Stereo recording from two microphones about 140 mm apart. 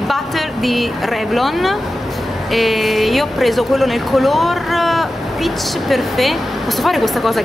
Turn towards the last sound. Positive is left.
turn(degrees=0)  # may be behind; listen again after turning